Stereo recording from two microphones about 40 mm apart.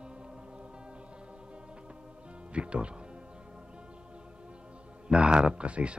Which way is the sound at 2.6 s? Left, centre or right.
Right.